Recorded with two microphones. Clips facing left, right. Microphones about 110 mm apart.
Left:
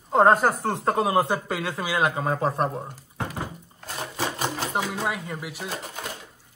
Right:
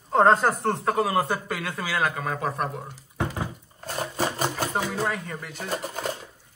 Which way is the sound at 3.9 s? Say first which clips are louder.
Right 2 dB; 45° right (ahead or behind).